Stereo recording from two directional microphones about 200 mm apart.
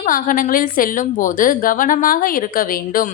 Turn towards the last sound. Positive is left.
turn(degrees=45)  # may be behind; listen again after turning